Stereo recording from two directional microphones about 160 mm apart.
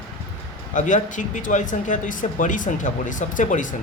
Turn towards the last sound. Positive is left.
turn(degrees=50)  # may be behind; listen again after turning